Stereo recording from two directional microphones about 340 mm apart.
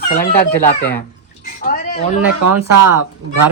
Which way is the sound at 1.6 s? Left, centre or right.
Left.